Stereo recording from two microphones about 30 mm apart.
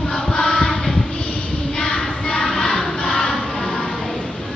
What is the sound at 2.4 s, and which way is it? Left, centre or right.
Music, centre.